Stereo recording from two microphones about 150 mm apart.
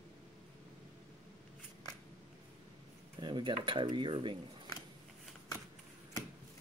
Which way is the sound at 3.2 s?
30° right (ahead or behind).